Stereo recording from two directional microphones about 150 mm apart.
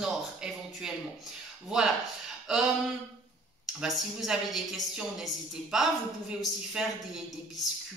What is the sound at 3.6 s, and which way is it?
A woman's voice, centre (ahead or behind).